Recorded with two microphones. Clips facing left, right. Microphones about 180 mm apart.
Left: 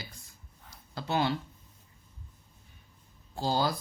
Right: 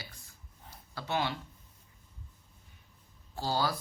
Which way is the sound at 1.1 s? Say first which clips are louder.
Left 4 dB; 30° left (ahead or behind).